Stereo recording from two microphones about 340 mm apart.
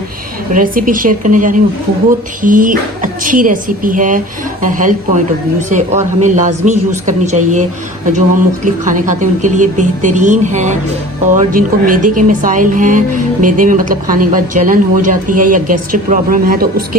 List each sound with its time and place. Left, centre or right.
0.5 s speech: right
8.6 s speech: right